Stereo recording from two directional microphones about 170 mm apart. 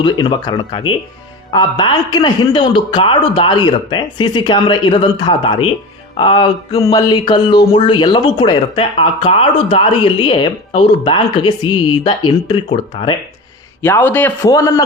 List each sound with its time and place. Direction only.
0.0 s speech: 25° left (ahead or behind)
6.1 s music: 30° left (ahead or behind)
6.8 s speech: 25° left (ahead or behind)
12.6 s music: 35° left (ahead or behind)
13.8 s a man's voice: 15° left (ahead or behind)